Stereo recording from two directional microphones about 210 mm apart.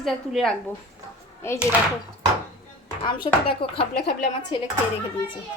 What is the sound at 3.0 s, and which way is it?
Speech, 25° left (ahead or behind).